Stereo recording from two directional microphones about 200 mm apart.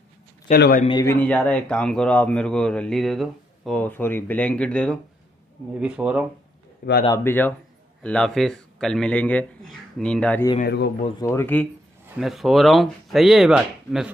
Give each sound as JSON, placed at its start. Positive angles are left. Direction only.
{"t": 0.5, "sound": "a man's voice", "side_deg": 45}
{"t": 1.0, "sound": "speech", "side_deg": 5}
{"t": 5.8, "sound": "speech", "side_deg": -5}
{"t": 6.8, "sound": "a man's voice", "side_deg": 45}
{"t": 7.2, "sound": "speech", "side_deg": 10}
{"t": 10.6, "sound": "speech", "side_deg": 55}
{"t": 11.1, "sound": "speech", "side_deg": 10}
{"t": 12.2, "sound": "speech", "side_deg": 0}